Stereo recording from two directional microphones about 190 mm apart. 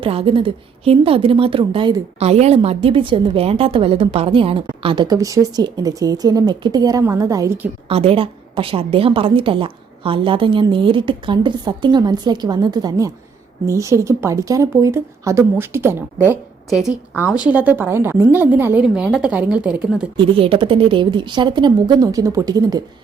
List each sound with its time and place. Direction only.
0.0 s a woman's voice: 30° right (ahead or behind); by 7.7 s 15° right (ahead or behind)
7.9 s a woman's voice: 30° right (ahead or behind); by 20.1 s 5° right (ahead or behind)
20.1 s a woman's voice: 30° right (ahead or behind)